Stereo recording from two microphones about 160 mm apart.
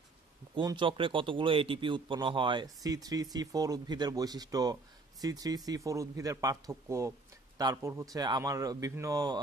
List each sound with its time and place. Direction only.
0.6 s speech: 30° right (ahead or behind)